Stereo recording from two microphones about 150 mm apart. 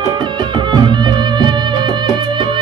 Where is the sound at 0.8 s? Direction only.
30° right (ahead or behind).